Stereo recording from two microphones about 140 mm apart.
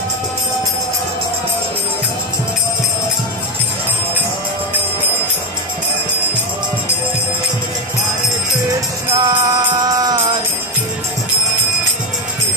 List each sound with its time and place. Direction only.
9.1 s music: 35° right (ahead or behind)